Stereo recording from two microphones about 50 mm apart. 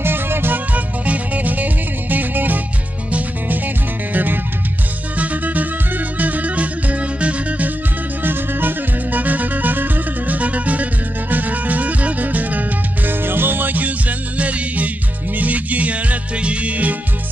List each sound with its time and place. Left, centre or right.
0.0 s music: right
0.7 s music: right
8.2 s music: right